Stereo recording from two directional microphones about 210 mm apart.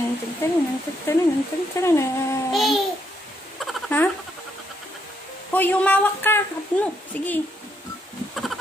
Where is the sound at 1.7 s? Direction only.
15° left (ahead or behind).